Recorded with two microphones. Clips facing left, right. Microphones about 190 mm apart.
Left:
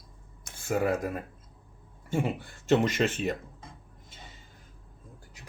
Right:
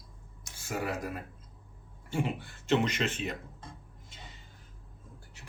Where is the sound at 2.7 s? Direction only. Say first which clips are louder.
Left 4 dB; 45° left (ahead or behind).